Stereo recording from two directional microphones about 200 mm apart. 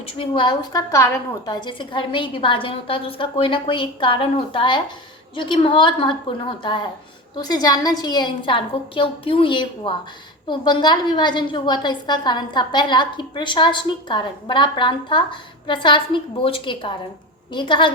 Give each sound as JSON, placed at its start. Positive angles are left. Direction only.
{"t": 0.2, "sound": "a woman's voice", "side_deg": 25}